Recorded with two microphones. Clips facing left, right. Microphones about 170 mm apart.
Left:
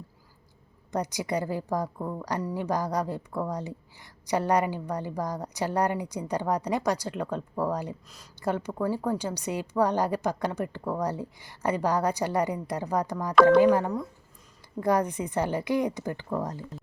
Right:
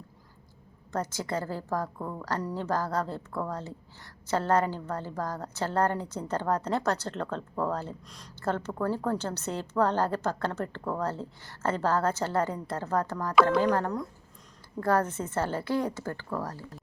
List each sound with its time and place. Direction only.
0.9 s a woman's voice: 15° left (ahead or behind)